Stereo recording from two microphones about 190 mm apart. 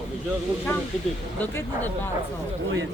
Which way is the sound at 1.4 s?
10° left (ahead or behind).